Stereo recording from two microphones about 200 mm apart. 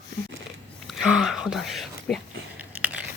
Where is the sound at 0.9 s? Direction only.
5° right (ahead or behind).